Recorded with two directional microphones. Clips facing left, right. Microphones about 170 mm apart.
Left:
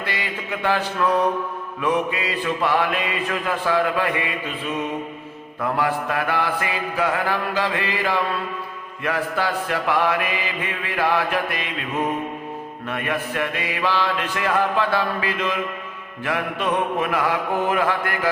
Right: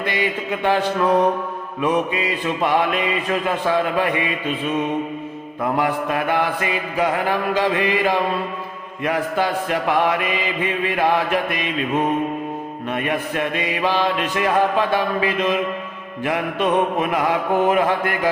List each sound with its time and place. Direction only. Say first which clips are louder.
0.0 s a man's voice: right 6 dB; 20° right (ahead or behind)
1.8 s mantra: right 2 dB; 20° right (ahead or behind)
5.7 s mantra: right 2 dB; 20° right (ahead or behind)
12.9 s mantra: right 3 dB; 20° right (ahead or behind)